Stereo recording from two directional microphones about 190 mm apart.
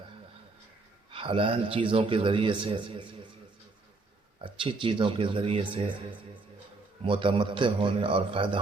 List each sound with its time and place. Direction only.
1.1 s a man's voice: 30° right (ahead or behind)
4.4 s a man's voice: 25° right (ahead or behind)
7.0 s a man's voice: 25° right (ahead or behind)